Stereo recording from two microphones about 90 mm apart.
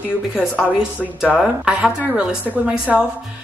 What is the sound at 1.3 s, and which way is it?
A woman's voice, 10° right (ahead or behind).